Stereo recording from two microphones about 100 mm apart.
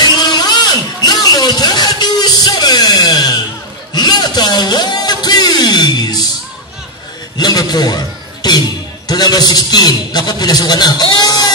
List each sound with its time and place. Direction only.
0.0 s music: 45° left (ahead or behind)
7.3 s a man's voice: 45° left (ahead or behind)